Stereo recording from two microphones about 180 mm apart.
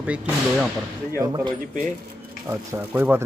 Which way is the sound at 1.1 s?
20° right (ahead or behind).